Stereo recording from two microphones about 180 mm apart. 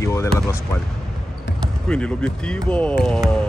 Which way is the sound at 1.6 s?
5° left (ahead or behind).